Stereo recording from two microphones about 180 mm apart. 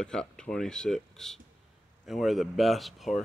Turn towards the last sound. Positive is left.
turn(degrees=0)  # may be behind; listen again after turning